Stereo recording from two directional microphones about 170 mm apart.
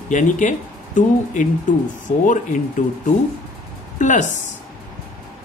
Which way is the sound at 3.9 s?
45° left (ahead or behind).